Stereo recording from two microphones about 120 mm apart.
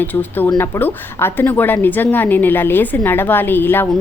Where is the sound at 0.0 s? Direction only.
15° left (ahead or behind).